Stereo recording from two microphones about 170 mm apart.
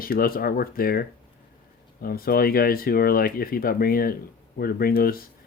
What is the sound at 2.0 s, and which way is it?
Speech, 60° left (ahead or behind).